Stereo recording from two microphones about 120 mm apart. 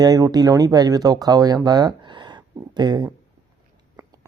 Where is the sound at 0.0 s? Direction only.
35° right (ahead or behind).